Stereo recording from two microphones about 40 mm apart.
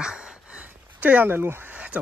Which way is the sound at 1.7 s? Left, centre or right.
Right.